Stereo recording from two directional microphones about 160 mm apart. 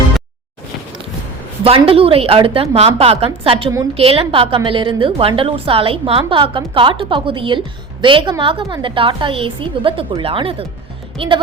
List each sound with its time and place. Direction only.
1.6 s a woman's voice: 35° right (ahead or behind)